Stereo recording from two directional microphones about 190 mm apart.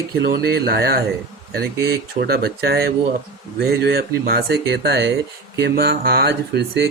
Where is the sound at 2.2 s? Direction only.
55° right (ahead or behind).